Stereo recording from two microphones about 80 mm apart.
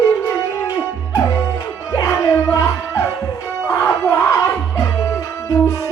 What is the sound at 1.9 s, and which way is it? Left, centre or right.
Music, left.